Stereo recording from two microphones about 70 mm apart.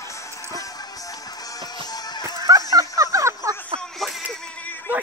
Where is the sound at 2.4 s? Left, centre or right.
Right.